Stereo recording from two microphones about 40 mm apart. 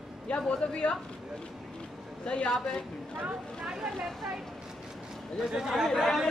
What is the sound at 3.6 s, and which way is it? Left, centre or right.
Speech, centre.